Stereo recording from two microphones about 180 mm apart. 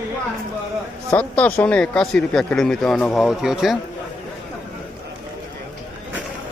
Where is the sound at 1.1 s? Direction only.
10° left (ahead or behind).